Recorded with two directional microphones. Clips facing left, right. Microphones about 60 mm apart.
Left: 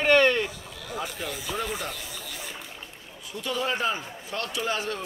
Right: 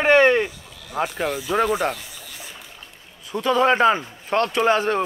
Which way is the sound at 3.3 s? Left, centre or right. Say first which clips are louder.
Right 11 dB; right.